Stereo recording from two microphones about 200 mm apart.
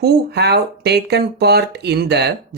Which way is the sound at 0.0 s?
55° right (ahead or behind).